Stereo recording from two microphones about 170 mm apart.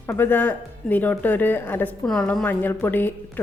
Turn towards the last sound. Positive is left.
turn(degrees=10)  # may be behind; listen again after turning